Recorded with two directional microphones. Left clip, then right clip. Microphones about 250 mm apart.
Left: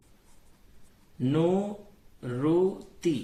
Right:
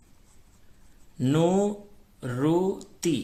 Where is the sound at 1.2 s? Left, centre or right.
Right.